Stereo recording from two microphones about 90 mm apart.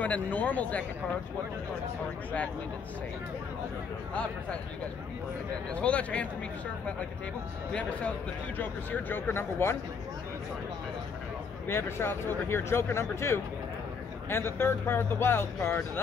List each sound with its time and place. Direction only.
0.0 s speech: 20° left (ahead or behind)
4.1 s speech: 15° left (ahead or behind)
5.8 s speech: 15° left (ahead or behind)
9.1 s speech: 25° left (ahead or behind)
11.6 s speech: 25° left (ahead or behind)